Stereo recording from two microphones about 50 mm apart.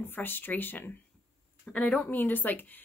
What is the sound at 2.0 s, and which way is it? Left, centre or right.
Speech, left.